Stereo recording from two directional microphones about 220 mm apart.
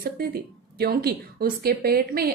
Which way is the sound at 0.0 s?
45° right (ahead or behind).